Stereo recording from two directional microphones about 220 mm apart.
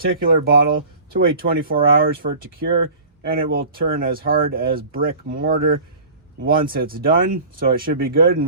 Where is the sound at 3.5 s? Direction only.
40° right (ahead or behind).